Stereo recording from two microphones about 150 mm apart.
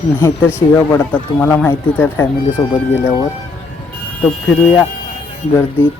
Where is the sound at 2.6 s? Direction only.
Centre (ahead or behind).